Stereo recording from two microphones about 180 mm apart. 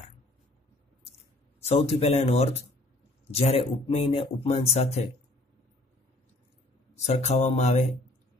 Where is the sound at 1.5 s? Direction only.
35° left (ahead or behind).